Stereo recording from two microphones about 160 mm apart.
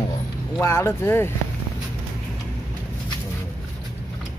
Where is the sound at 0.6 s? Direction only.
15° left (ahead or behind).